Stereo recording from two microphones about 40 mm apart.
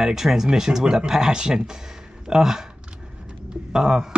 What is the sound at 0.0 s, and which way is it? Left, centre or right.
Speech, centre.